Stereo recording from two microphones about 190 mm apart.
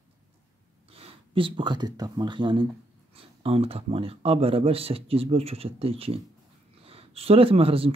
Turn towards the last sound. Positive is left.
turn(degrees=-30)  # may be behind; listen again after turning